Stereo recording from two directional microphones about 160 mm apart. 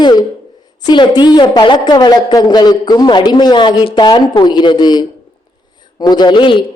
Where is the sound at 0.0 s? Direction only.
25° left (ahead or behind).